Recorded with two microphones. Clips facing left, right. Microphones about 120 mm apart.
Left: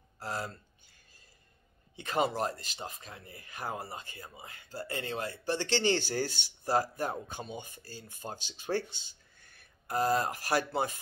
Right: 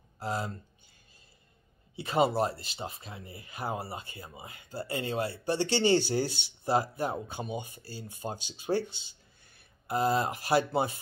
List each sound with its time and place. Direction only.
0.2 s speech: 20° right (ahead or behind)
2.0 s speech: 25° right (ahead or behind)